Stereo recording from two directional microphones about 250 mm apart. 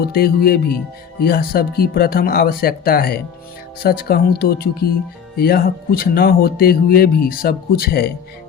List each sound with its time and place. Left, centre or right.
0.0 s speech: left